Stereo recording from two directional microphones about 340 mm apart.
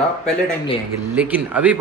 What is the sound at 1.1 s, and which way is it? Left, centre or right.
Speech, centre.